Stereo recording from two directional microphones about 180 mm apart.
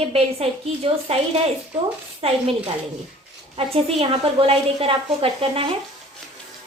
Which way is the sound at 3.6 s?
30° right (ahead or behind).